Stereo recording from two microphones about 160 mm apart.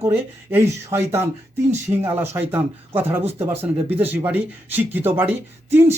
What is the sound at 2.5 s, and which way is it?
Speech, 10° right (ahead or behind).